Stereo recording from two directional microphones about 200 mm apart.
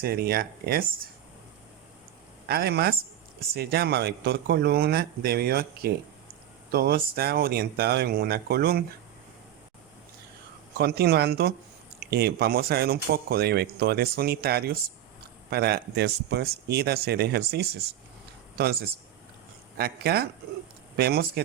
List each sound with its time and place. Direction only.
0.0 s speech: 50° right (ahead or behind)
2.5 s speech: 50° right (ahead or behind)
10.8 s speech: 55° right (ahead or behind)